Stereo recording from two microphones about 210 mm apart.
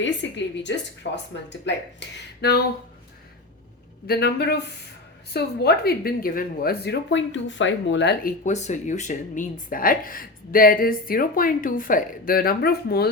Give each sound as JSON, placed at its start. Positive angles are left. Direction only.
{"t": 0.0, "sound": "a woman's voice", "side_deg": 60}
{"t": 4.0, "sound": "speech", "side_deg": 50}
{"t": 8.4, "sound": "speech", "side_deg": 35}